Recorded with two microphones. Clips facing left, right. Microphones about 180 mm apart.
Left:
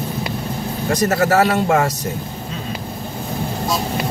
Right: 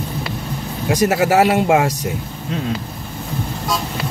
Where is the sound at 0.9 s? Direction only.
10° right (ahead or behind).